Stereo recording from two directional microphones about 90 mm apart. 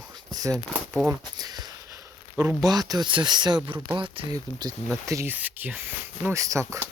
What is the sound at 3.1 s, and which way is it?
Speech, 60° right (ahead or behind).